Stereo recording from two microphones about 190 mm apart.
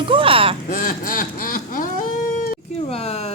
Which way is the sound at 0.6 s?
45° left (ahead or behind).